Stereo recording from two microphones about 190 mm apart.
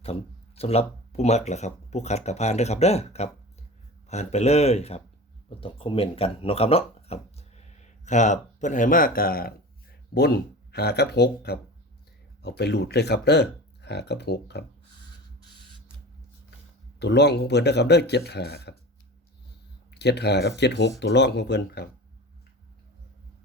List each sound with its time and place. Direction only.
0.0 s speech: 30° left (ahead or behind); by 14.6 s 60° left (ahead or behind)
17.0 s speech: 65° left (ahead or behind)
19.9 s speech: 60° left (ahead or behind)